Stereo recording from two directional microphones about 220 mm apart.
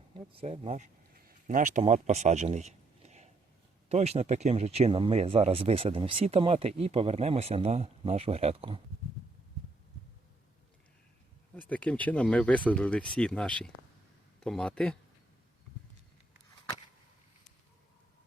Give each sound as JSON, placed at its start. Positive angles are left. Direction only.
{"t": 0.3, "sound": "speech", "side_deg": -25}
{"t": 11.5, "sound": "speech", "side_deg": 5}